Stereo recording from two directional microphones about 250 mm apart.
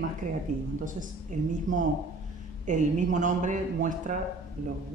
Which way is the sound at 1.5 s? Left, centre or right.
Right.